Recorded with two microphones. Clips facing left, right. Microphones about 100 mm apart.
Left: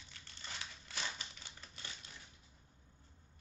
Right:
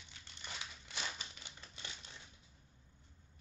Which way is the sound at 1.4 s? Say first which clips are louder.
Even; 20° right (ahead or behind).